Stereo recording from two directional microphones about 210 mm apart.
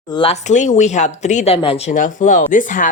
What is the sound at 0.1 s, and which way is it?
A woman's voice, 25° left (ahead or behind).